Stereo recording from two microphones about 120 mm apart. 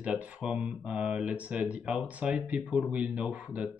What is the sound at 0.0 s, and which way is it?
Speech, 10° right (ahead or behind).